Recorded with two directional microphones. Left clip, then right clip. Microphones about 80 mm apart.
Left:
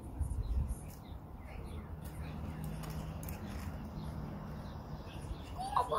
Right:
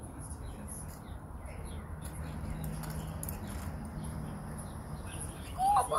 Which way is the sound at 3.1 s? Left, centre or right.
Left.